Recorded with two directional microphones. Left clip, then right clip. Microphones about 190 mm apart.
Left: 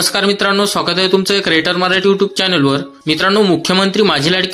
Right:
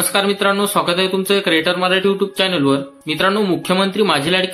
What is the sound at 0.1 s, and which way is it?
Speech, 25° left (ahead or behind).